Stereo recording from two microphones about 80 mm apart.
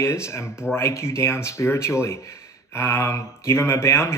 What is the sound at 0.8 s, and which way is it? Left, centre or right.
Speech, left.